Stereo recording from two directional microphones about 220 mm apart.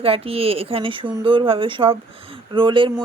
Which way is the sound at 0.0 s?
25° right (ahead or behind).